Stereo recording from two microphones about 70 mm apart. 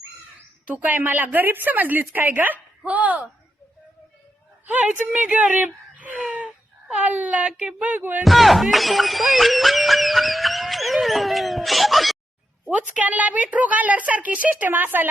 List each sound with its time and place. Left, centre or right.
0.7 s a woman's voice: right
4.6 s a woman's voice: right
8.2 s speech: centre
12.6 s a woman's voice: right